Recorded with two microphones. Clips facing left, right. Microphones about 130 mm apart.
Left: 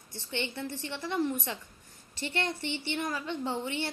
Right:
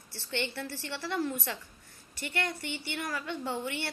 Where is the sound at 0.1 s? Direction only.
15° left (ahead or behind).